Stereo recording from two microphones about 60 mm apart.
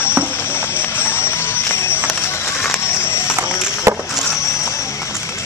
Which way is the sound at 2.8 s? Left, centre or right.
Left.